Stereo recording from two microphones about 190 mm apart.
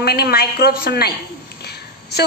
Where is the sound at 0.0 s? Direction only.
55° left (ahead or behind).